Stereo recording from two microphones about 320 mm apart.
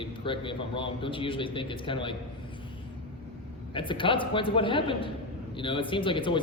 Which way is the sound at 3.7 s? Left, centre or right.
Centre.